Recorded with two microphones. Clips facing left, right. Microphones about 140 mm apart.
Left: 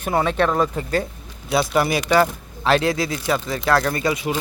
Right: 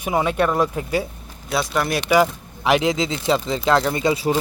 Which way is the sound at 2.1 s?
15° right (ahead or behind).